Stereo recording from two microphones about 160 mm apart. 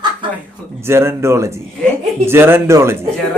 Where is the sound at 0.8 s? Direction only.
15° right (ahead or behind).